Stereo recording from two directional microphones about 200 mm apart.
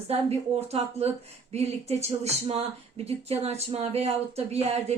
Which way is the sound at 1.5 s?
30° right (ahead or behind).